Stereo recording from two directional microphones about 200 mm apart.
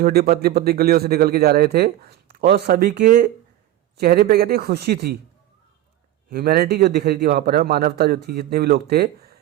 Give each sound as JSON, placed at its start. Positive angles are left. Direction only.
{"t": 0.0, "sound": "a man's voice", "side_deg": -50}
{"t": 6.3, "sound": "a man's voice", "side_deg": -50}